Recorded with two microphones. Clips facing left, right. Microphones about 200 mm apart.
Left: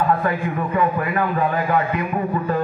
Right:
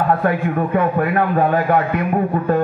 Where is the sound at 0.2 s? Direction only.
50° right (ahead or behind).